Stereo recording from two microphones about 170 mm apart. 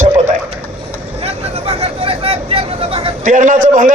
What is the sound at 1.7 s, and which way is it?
Speech, 35° right (ahead or behind).